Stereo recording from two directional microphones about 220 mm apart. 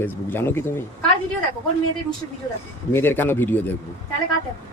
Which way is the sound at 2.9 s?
10° left (ahead or behind).